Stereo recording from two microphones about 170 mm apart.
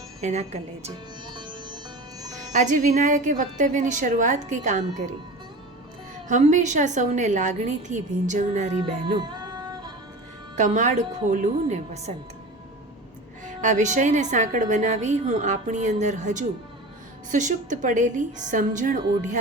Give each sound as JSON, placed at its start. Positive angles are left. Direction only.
{"t": 0.2, "sound": "a woman's voice", "side_deg": -40}
{"t": 1.3, "sound": "music", "side_deg": -25}
{"t": 2.5, "sound": "a woman's voice", "side_deg": -45}
{"t": 6.2, "sound": "a woman's voice", "side_deg": -45}
{"t": 9.2, "sound": "music", "side_deg": -25}
{"t": 10.5, "sound": "a woman's voice", "side_deg": -45}
{"t": 13.4, "sound": "a woman's voice", "side_deg": -50}